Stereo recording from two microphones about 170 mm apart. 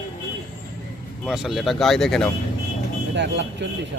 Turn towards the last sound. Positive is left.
turn(degrees=-90)